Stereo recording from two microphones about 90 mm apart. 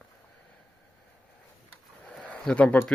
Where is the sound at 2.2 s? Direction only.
15° left (ahead or behind).